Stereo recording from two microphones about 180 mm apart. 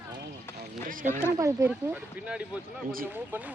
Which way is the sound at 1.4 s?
10° right (ahead or behind).